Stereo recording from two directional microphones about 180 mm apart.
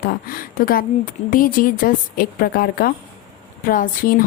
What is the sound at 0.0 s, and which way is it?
Speech, 55° left (ahead or behind).